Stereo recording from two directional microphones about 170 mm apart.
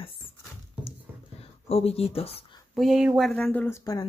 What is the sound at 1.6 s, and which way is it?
Speech, 35° left (ahead or behind).